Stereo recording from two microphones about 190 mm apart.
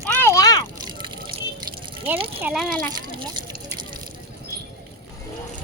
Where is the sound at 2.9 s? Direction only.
20° right (ahead or behind).